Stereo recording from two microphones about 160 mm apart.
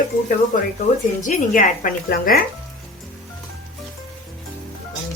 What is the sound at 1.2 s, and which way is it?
A woman's voice, 55° left (ahead or behind).